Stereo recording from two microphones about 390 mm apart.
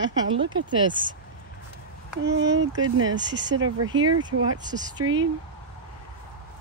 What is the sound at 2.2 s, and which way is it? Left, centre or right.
Speech, right.